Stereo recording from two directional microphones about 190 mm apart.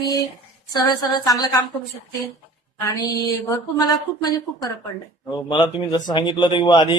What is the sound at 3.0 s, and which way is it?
A man's voice, 20° left (ahead or behind).